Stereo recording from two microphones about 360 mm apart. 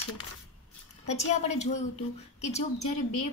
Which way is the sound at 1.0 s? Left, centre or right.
Centre.